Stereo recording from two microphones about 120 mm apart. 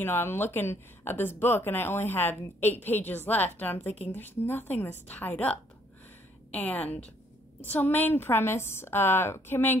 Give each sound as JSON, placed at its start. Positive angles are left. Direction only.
{"t": 0.0, "sound": "a woman's voice", "side_deg": 20}